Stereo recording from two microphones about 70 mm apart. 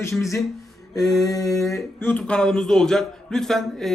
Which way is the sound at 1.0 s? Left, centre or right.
Left.